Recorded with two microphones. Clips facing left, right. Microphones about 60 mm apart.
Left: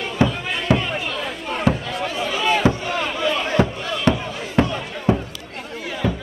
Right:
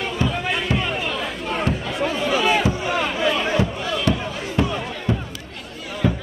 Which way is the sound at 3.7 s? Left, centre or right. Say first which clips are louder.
Right 1 dB; centre.